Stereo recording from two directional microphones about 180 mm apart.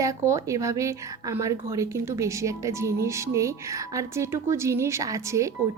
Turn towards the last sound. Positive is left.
turn(degrees=-15)  # may be behind; listen again after turning